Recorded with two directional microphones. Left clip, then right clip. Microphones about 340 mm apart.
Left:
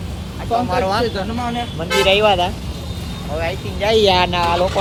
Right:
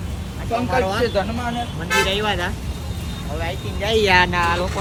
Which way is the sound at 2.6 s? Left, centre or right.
Right.